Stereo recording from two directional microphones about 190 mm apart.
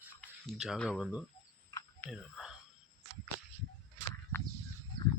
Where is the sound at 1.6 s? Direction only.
15° left (ahead or behind).